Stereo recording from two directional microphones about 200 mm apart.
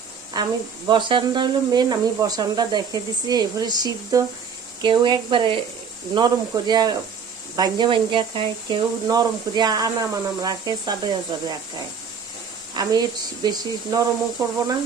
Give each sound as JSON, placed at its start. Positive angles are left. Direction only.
{"t": 0.4, "sound": "speech", "side_deg": -20}
{"t": 12.7, "sound": "speech", "side_deg": -20}